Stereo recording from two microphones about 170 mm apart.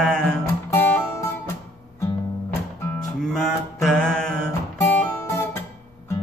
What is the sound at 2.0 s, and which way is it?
Music, 15° left (ahead or behind).